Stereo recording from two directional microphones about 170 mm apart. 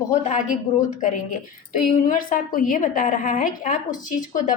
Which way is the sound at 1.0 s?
50° left (ahead or behind).